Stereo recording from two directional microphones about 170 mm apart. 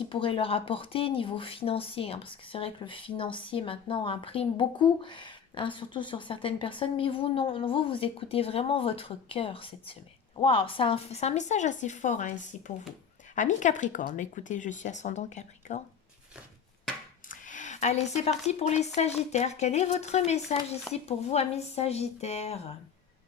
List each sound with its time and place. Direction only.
0.1 s speech: 30° left (ahead or behind)
17.2 s a woman's voice: 50° left (ahead or behind)